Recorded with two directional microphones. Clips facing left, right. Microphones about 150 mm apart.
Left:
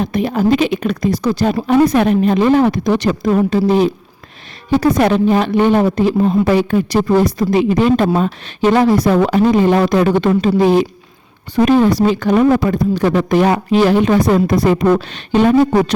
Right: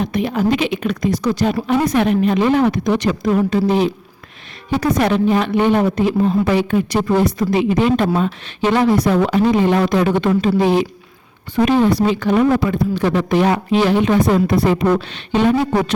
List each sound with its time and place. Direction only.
0.0 s speech: 40° left (ahead or behind)